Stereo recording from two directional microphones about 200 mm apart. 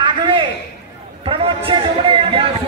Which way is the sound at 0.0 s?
25° right (ahead or behind).